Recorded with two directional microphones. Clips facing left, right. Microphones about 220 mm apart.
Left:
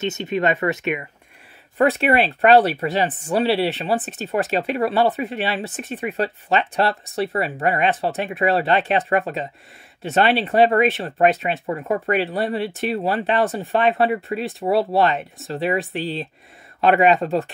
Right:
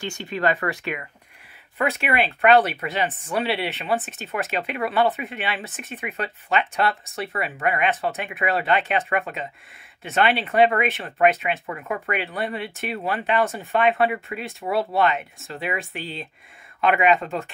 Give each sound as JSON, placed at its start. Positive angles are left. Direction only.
{"t": 0.0, "sound": "speech", "side_deg": 20}
{"t": 1.8, "sound": "speech", "side_deg": 35}